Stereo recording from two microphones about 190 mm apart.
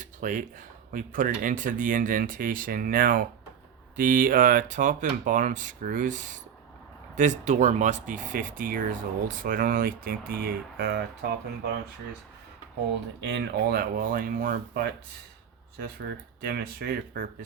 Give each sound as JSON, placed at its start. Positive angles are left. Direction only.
{"t": 0.0, "sound": "a sound", "side_deg": -40}
{"t": 0.9, "sound": "speech", "side_deg": -45}
{"t": 13.2, "sound": "speech", "side_deg": -60}
{"t": 16.4, "sound": "speech", "side_deg": -55}